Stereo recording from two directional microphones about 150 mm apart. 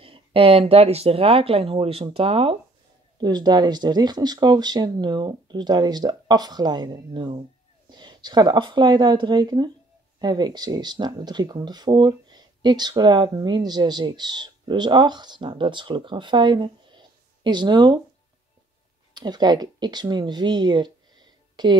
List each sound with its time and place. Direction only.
0.0 s speech: 35° right (ahead or behind)
3.2 s speech: 30° right (ahead or behind)
19.1 s speech: 30° right (ahead or behind)